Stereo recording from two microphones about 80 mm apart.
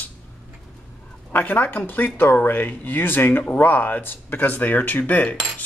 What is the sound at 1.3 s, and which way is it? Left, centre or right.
Speech, left.